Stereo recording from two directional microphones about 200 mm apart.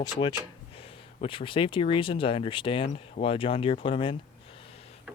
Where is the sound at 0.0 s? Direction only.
20° left (ahead or behind).